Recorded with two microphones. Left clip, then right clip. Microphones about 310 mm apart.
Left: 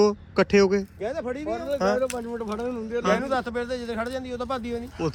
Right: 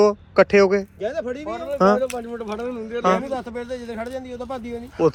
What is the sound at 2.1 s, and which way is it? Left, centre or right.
Speech, centre.